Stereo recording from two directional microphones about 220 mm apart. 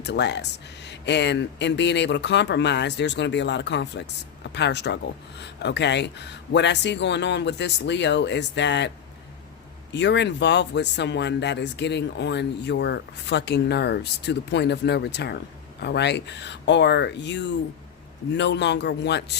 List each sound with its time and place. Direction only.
0.0 s speech: 50° left (ahead or behind)
9.9 s speech: 50° left (ahead or behind)